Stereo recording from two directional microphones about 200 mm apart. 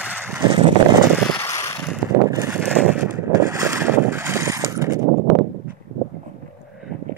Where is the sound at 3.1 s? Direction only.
15° right (ahead or behind).